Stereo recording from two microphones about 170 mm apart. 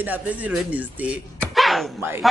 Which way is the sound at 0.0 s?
10° right (ahead or behind).